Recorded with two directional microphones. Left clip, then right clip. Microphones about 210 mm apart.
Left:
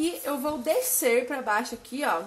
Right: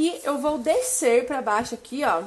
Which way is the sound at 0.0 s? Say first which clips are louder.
Right 5 dB; 40° right (ahead or behind).